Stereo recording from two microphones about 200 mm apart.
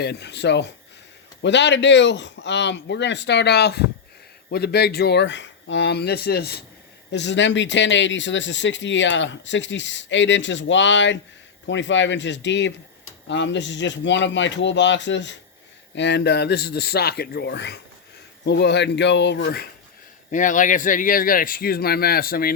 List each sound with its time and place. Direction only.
0.0 s speech: 55° left (ahead or behind)
20.3 s speech: 40° left (ahead or behind)